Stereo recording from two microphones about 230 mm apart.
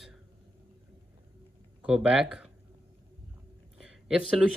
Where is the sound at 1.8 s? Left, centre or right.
Centre.